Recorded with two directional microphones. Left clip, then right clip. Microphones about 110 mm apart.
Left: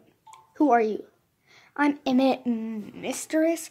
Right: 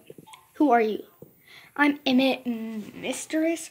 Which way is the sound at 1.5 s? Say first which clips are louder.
Right 2 dB; 5° right (ahead or behind).